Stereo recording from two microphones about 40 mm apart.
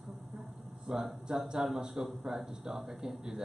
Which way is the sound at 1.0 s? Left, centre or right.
Centre.